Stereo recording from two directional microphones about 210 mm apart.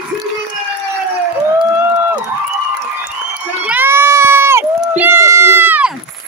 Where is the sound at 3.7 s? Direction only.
10° right (ahead or behind).